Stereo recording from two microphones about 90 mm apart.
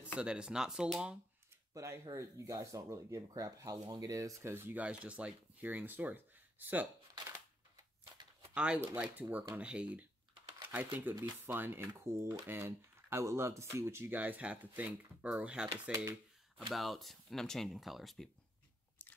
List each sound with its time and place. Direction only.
0.2 s speech: 10° right (ahead or behind)
1.7 s speech: 30° right (ahead or behind)
4.8 s speech: 15° right (ahead or behind)
7.2 s a sound: 30° right (ahead or behind)
8.5 s speech: 15° right (ahead or behind); by 14.1 s 30° right (ahead or behind)
14.1 s speech: 15° right (ahead or behind)
16.7 s speech: centre (ahead or behind)